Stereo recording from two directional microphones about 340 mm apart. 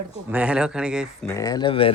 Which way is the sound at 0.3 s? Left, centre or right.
Centre.